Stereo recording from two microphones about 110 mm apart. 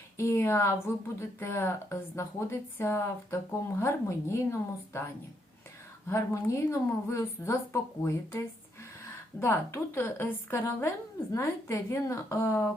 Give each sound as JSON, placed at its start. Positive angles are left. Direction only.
{"t": 0.2, "sound": "speech", "side_deg": 25}
{"t": 6.1, "sound": "speech", "side_deg": 25}
{"t": 9.4, "sound": "speech", "side_deg": 25}